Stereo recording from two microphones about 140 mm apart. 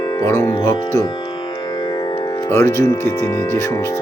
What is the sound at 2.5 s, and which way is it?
Speech, 20° left (ahead or behind).